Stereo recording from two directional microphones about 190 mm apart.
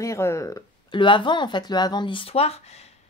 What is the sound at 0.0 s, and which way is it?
Speech, 15° left (ahead or behind).